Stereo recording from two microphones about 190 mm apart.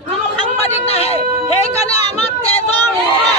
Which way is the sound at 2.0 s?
30° left (ahead or behind).